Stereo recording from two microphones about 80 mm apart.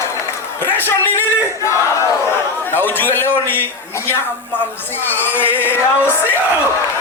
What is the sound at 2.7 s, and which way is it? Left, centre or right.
Speech, left.